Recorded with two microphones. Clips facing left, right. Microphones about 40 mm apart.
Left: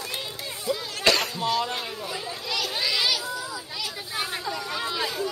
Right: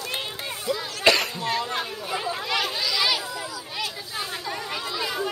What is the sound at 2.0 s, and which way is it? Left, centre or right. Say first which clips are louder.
Children playing: right 5 dB; right.